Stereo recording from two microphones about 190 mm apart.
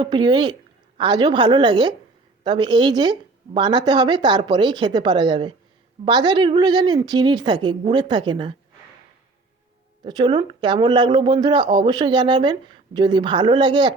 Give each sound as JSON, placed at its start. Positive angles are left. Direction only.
{"t": 0.0, "sound": "a man's voice", "side_deg": -25}
{"t": 10.0, "sound": "a man's voice", "side_deg": -20}